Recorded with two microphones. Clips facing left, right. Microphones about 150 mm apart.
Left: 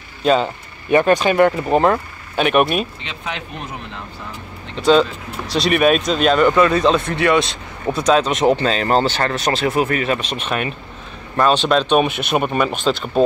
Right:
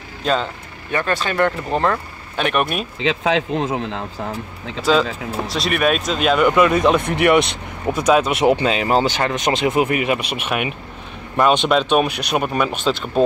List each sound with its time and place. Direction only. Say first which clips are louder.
0.2 s speech: left 4 dB; 5° left (ahead or behind)
0.8 s speech: left 8 dB; 15° left (ahead or behind)
3.0 s speech: right 11 dB; 90° right
5.5 s speech: left 5 dB; centre (ahead or behind); by 8.0 s 20° right (ahead or behind)
8.0 s speech: even; 10° right (ahead or behind)